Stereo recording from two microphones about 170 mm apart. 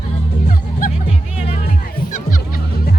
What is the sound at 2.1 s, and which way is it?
Music, 55° left (ahead or behind).